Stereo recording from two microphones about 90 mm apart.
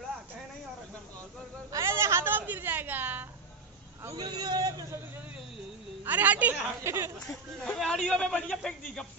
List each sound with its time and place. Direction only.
1.7 s a sound: 35° right (ahead or behind)
4.1 s a man's voice: 45° right (ahead or behind)
6.0 s a woman's voice: 20° right (ahead or behind)
6.8 s a woman's voice: 30° right (ahead or behind)
7.6 s a man's voice: 5° left (ahead or behind)